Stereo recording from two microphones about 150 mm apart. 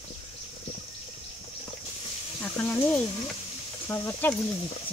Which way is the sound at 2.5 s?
10° left (ahead or behind).